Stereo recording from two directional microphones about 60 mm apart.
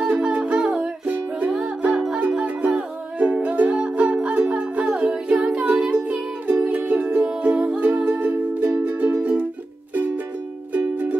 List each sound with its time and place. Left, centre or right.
0.0 s music: centre
10.7 s music: right